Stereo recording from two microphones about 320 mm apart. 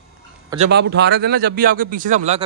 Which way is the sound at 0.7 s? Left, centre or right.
Right.